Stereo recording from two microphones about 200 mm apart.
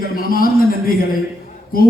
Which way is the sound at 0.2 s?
45° left (ahead or behind).